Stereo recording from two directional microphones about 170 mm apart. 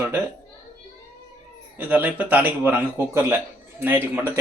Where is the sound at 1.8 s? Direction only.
10° right (ahead or behind).